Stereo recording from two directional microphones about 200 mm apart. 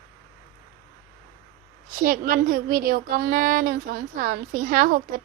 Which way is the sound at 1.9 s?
45° right (ahead or behind).